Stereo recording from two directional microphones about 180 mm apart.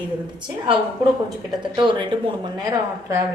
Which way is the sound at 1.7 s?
25° right (ahead or behind).